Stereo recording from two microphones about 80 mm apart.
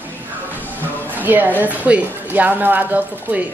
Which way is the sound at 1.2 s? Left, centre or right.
Right.